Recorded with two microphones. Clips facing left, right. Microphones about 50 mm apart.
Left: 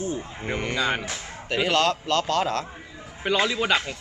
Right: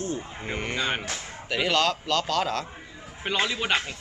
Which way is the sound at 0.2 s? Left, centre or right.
Centre.